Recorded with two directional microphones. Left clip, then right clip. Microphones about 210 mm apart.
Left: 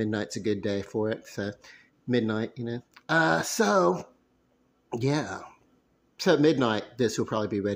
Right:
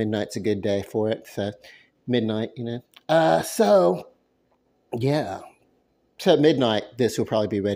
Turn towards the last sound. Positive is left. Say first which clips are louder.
# right 5 dB
turn(degrees=-20)  # may be behind; listen again after turning